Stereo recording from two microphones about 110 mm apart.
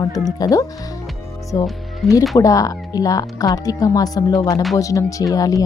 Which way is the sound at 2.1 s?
30° left (ahead or behind).